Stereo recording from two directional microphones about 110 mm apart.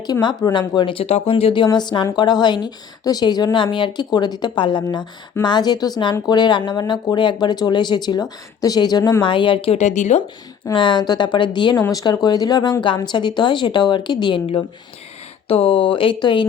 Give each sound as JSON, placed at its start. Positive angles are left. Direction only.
{"t": 0.0, "sound": "speech", "side_deg": 40}
{"t": 1.0, "sound": "speech", "side_deg": 65}
{"t": 1.6, "sound": "speech", "side_deg": 40}
{"t": 9.2, "sound": "speech", "side_deg": 50}
{"t": 9.7, "sound": "speech", "side_deg": 90}
{"t": 10.8, "sound": "speech", "side_deg": 45}
{"t": 11.8, "sound": "speech", "side_deg": 35}